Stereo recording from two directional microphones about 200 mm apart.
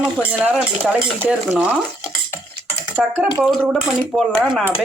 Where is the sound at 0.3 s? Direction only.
5° right (ahead or behind).